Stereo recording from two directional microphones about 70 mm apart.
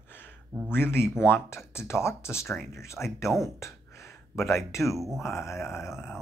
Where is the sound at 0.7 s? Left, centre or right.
Left.